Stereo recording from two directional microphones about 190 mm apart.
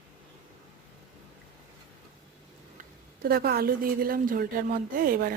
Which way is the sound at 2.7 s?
50° right (ahead or behind).